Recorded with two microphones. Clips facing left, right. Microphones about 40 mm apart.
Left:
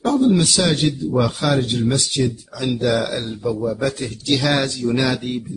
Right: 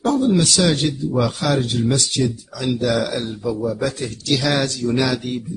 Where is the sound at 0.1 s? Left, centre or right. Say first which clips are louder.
Left 2 dB; centre.